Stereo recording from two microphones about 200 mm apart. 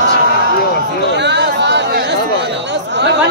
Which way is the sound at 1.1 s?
60° right (ahead or behind).